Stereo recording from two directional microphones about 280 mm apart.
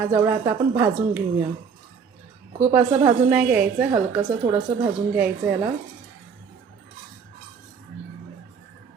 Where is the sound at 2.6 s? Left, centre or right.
Centre.